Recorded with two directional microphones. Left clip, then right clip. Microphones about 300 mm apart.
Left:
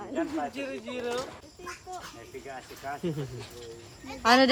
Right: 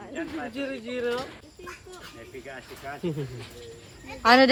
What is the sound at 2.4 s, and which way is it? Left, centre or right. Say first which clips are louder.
Speech: left 1 dB; centre.